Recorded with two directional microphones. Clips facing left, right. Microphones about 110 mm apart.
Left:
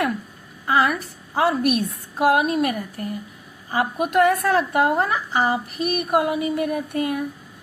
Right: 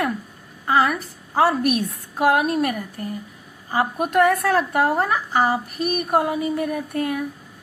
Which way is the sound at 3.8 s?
40° right (ahead or behind).